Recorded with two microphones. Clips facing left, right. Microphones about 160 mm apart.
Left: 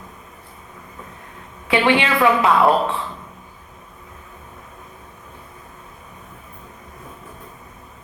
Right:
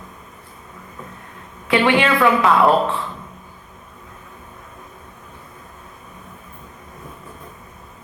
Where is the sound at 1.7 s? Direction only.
25° left (ahead or behind).